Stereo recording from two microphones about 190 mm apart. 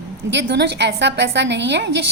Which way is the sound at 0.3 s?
65° right (ahead or behind).